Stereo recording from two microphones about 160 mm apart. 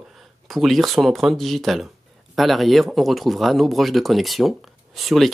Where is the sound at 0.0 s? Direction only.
Centre (ahead or behind).